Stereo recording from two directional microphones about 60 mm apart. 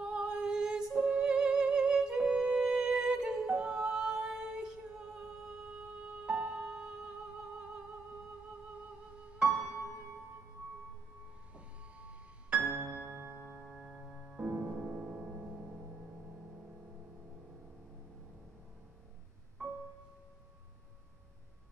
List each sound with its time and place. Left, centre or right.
0.0 s music: centre
9.4 s music: right
11.5 s music: right
13.4 s music: right
13.7 s music: centre